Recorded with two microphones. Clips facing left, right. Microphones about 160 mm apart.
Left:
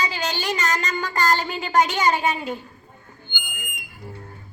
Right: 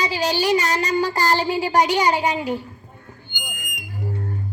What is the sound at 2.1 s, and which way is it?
Speech, 15° right (ahead or behind).